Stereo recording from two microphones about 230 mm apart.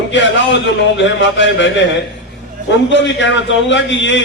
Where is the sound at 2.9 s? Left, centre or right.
Left.